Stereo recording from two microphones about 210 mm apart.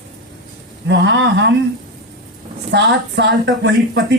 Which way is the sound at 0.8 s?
55° right (ahead or behind).